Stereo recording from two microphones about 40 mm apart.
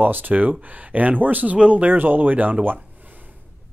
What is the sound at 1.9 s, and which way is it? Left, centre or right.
Speech, right.